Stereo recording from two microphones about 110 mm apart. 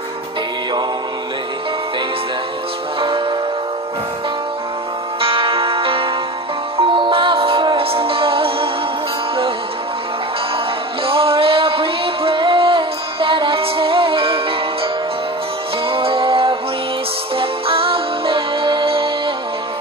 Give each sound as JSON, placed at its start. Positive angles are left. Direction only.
{"t": 3.0, "sound": "music", "side_deg": -50}
{"t": 5.2, "sound": "music", "side_deg": -55}
{"t": 11.1, "sound": "music", "side_deg": -55}
{"t": 15.9, "sound": "music", "side_deg": -55}